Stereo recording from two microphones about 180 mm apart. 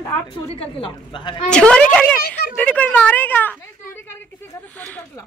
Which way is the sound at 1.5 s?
5° left (ahead or behind).